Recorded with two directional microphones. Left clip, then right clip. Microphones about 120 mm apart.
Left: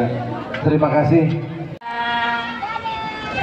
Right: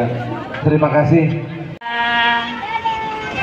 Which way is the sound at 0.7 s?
10° left (ahead or behind).